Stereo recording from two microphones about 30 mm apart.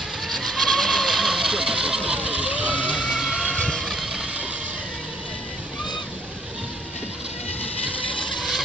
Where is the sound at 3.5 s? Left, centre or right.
Left.